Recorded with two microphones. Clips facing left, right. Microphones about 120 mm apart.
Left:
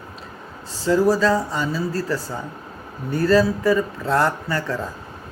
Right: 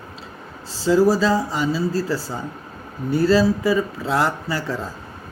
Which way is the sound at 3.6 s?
5° right (ahead or behind).